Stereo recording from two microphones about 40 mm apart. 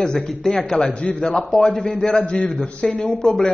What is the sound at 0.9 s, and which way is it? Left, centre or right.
Speech, left.